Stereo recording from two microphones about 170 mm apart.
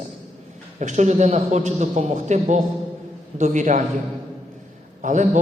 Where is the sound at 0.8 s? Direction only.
45° right (ahead or behind).